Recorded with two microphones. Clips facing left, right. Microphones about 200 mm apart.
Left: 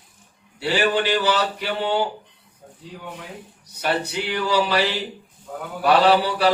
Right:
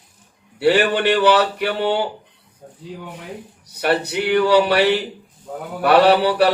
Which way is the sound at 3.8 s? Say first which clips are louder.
Right 5 dB; 60° right (ahead or behind).